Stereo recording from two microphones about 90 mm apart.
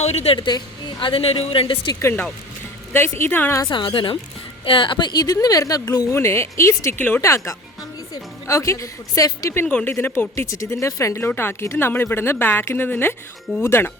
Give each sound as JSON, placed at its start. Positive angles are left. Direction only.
{"t": 0.3, "sound": "a woman's voice", "side_deg": 60}
{"t": 2.0, "sound": "speech", "side_deg": 30}
{"t": 3.7, "sound": "a woman's voice", "side_deg": 65}
{"t": 6.1, "sound": "a woman's voice", "side_deg": 30}
{"t": 9.6, "sound": "speech", "side_deg": 15}
{"t": 10.0, "sound": "a woman's voice", "side_deg": 30}
{"t": 11.2, "sound": "speech", "side_deg": 25}